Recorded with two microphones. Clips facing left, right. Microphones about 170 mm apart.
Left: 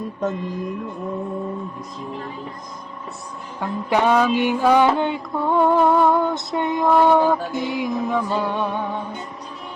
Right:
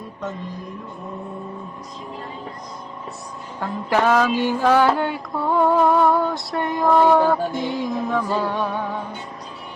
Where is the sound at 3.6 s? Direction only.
15° left (ahead or behind).